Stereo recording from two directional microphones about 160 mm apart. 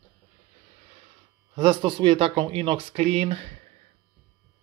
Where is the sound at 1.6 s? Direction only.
30° right (ahead or behind).